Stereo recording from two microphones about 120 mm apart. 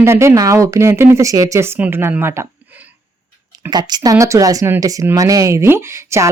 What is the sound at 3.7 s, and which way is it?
Speech, 35° right (ahead or behind).